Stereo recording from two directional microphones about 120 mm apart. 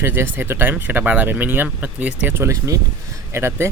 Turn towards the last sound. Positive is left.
turn(degrees=-20)  # may be behind; listen again after turning